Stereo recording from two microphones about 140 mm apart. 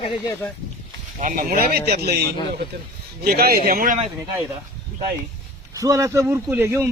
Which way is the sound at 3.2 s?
90° right.